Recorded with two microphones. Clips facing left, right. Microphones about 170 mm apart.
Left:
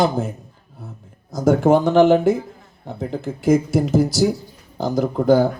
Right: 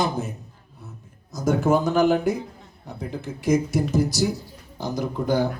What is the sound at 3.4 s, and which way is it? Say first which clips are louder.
Speech: left 5 dB; 50° left (ahead or behind).